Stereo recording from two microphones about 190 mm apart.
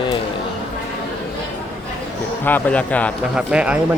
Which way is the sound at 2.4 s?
10° left (ahead or behind).